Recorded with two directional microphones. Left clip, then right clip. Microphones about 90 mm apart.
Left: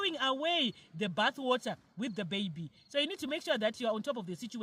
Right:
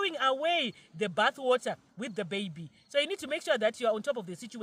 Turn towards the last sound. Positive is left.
turn(degrees=-40)  # may be behind; listen again after turning